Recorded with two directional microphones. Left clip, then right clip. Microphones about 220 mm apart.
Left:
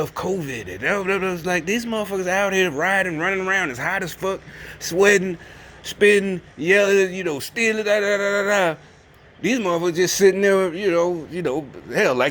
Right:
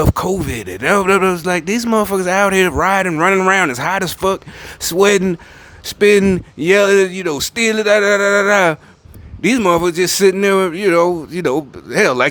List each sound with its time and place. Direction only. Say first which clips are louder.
0.0 s a man's voice: right 7 dB; 30° right (ahead or behind)